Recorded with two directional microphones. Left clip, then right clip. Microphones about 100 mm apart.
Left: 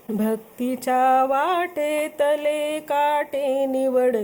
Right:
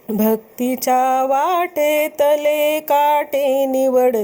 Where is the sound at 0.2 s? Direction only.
30° right (ahead or behind).